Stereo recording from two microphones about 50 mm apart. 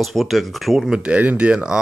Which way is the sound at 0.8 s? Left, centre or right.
Centre.